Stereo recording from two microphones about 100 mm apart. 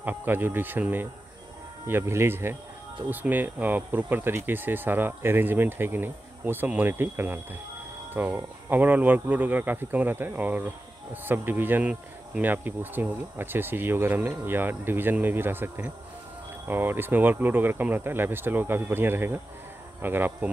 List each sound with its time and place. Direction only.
0.0 s speech: 20° right (ahead or behind)